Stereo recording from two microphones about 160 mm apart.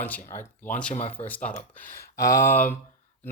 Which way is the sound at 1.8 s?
60° left (ahead or behind).